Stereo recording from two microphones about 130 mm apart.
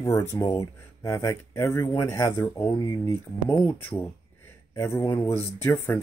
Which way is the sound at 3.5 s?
15° left (ahead or behind).